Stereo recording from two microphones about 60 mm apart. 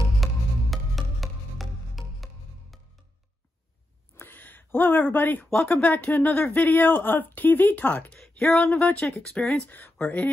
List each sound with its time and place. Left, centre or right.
0.2 s music: centre
4.2 s a sound: left
5.5 s speech: centre
8.2 s a sound: centre
8.7 s speech: centre
9.7 s speech: left